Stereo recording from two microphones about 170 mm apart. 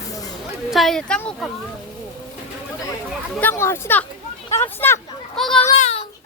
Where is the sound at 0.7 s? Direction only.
Centre (ahead or behind).